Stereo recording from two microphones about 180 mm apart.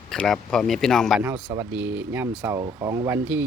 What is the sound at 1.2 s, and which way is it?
Speech, 15° right (ahead or behind).